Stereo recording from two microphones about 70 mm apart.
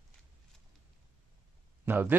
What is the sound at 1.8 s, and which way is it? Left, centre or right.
Speech, right.